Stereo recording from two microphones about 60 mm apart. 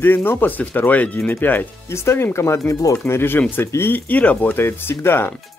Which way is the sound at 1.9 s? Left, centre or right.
Left.